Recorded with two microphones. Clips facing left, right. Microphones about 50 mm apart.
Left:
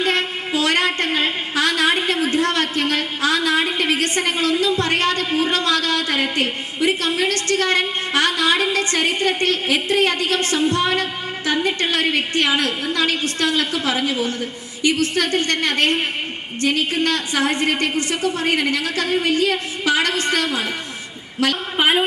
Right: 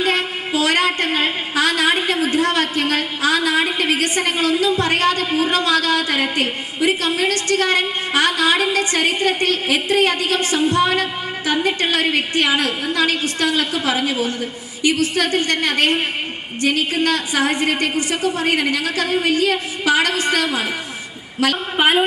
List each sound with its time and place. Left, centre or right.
0.0 s a woman's voice: centre
15.0 s a woman's voice: centre